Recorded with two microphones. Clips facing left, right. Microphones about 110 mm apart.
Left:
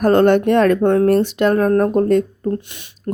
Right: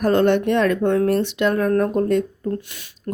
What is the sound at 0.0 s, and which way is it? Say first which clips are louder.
Speech: left 4 dB; 45° left (ahead or behind).